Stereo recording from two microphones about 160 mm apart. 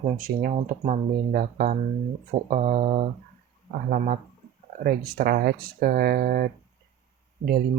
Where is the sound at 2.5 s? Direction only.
55° right (ahead or behind).